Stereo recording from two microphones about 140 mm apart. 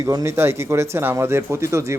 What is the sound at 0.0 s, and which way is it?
A man's voice, 25° right (ahead or behind).